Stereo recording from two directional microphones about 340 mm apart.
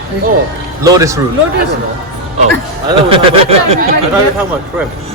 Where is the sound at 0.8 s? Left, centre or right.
Centre.